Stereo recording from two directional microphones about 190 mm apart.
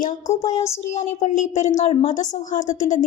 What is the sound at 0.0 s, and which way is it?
A woman's voice, 40° left (ahead or behind).